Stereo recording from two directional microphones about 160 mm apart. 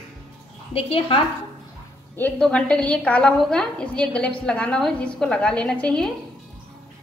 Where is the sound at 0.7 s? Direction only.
35° left (ahead or behind).